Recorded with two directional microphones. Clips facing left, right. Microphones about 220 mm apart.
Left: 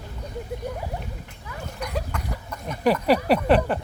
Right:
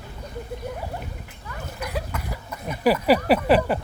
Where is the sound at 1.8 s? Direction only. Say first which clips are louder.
Even; 5° right (ahead or behind).